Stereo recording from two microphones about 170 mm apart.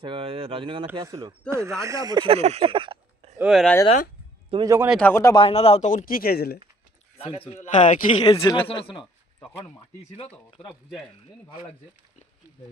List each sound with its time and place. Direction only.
0.0 s speech: 30° right (ahead or behind)
0.9 s speech: 20° right (ahead or behind)
3.3 s speech: 5° right (ahead or behind)
4.5 s a man's voice: 20° right (ahead or behind)
4.9 s a man's voice: 10° left (ahead or behind)
5.3 s speech: 30° left (ahead or behind); by 6.6 s 70° left (ahead or behind)
7.2 s a man's voice: 30° left (ahead or behind)
8.2 s a man's voice: 25° left (ahead or behind)